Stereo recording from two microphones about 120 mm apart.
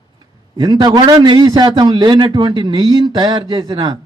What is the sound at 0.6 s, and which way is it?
A man's voice, 35° right (ahead or behind).